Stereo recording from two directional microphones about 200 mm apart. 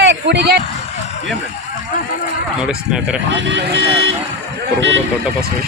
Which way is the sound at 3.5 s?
70° right (ahead or behind).